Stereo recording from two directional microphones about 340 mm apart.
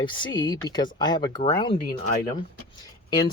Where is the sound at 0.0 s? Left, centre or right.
Centre.